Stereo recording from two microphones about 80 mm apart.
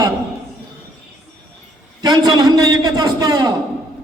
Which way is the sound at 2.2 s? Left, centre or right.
Right.